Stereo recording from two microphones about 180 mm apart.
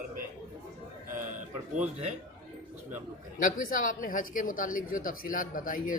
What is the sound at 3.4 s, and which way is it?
Speech, 50° left (ahead or behind).